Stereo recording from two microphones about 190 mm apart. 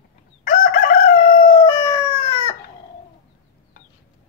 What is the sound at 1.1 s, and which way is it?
Howl, 25° left (ahead or behind).